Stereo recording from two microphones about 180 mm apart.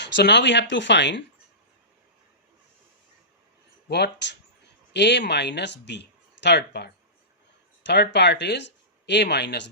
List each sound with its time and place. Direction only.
0.0 s speech: 75° left (ahead or behind)
3.8 s speech: 65° left (ahead or behind)